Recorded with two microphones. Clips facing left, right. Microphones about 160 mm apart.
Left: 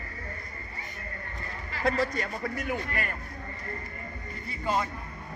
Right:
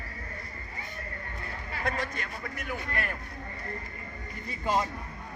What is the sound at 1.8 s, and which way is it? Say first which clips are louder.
Speech: left 6 dB; 35° left (ahead or behind).